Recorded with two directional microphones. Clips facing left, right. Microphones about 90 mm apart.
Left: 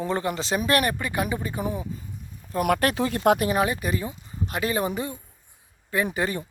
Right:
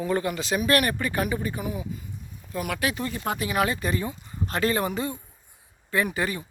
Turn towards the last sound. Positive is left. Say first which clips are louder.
# left 1 dB
turn(degrees=20)  # may be behind; listen again after turning